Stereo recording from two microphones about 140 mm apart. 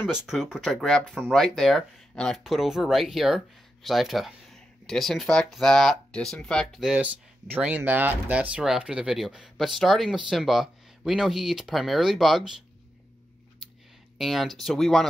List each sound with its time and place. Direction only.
0.0 s speech: 5° right (ahead or behind)
14.1 s speech: centre (ahead or behind)